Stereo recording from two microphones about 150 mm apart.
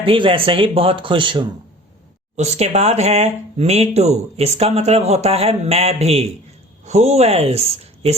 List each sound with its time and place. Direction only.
0.0 s speech: 35° right (ahead or behind)
2.3 s speech: 45° right (ahead or behind)